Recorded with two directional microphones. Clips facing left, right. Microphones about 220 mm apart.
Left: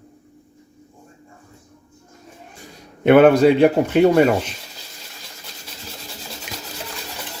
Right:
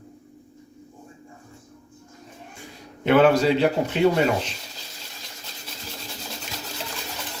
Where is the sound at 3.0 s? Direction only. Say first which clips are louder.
Left 6 dB; 60° left (ahead or behind).